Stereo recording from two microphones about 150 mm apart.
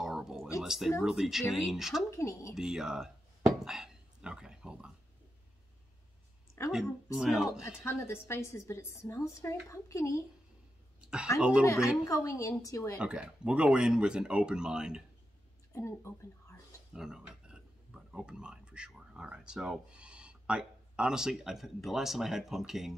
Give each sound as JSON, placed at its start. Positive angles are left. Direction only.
{"t": 0.0, "sound": "a sound", "side_deg": -5}
{"t": 0.6, "sound": "speech", "side_deg": 0}
{"t": 2.0, "sound": "a woman's voice", "side_deg": 20}
{"t": 2.5, "sound": "speech", "side_deg": -5}
{"t": 3.5, "sound": "a sound", "side_deg": -5}
{"t": 6.7, "sound": "speech", "side_deg": -5}
{"t": 7.8, "sound": "a woman's voice", "side_deg": 15}
{"t": 11.6, "sound": "a woman's voice", "side_deg": 20}
{"t": 13.0, "sound": "speech", "side_deg": -5}
{"t": 15.7, "sound": "speech", "side_deg": 20}
{"t": 16.9, "sound": "speech", "side_deg": -5}